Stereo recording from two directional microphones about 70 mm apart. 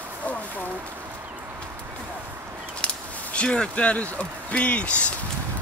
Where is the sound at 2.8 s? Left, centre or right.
Centre.